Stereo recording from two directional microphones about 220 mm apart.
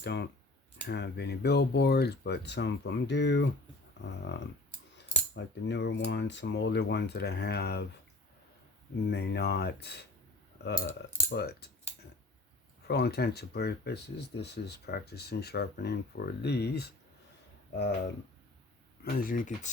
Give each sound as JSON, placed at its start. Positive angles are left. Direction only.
{"t": 0.0, "sound": "speech", "side_deg": 50}
{"t": 9.0, "sound": "speech", "side_deg": 50}
{"t": 11.3, "sound": "speech", "side_deg": 45}
{"t": 12.9, "sound": "speech", "side_deg": 45}
{"t": 19.0, "sound": "speech", "side_deg": 40}